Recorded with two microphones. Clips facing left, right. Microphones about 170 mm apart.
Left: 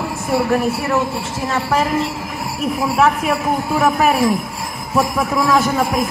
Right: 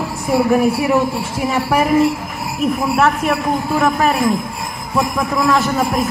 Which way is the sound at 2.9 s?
Centre (ahead or behind).